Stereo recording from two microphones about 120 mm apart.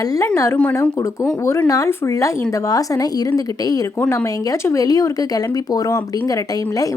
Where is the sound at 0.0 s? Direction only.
30° left (ahead or behind).